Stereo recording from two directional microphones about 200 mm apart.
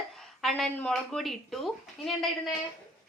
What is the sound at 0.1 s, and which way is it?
Speech, centre (ahead or behind).